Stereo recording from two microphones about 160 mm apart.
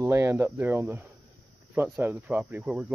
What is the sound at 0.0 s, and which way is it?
Speech, 15° right (ahead or behind).